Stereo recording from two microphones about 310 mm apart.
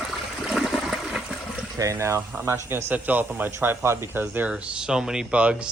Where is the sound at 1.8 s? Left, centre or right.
Centre.